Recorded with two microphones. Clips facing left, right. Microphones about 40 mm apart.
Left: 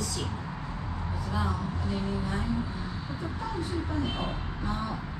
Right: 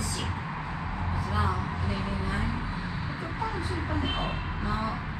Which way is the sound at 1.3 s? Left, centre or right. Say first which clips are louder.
Right 2 dB; right.